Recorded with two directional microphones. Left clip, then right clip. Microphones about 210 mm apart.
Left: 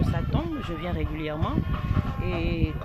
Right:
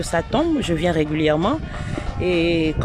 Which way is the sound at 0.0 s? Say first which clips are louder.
Right 11 dB; 50° right (ahead or behind).